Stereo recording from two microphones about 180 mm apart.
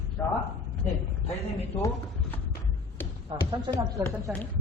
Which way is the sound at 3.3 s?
25° right (ahead or behind).